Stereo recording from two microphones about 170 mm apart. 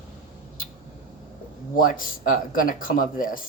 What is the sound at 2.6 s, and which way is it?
Speech, 55° left (ahead or behind).